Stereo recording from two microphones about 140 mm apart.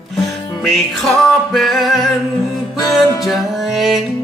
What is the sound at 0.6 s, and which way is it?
Music, centre (ahead or behind).